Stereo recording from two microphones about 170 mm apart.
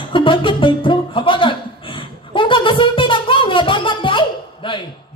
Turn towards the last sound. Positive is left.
turn(degrees=30)  # may be behind; listen again after turning